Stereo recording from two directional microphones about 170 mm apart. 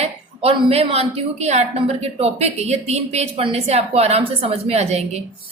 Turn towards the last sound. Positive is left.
turn(degrees=-40)  # may be behind; listen again after turning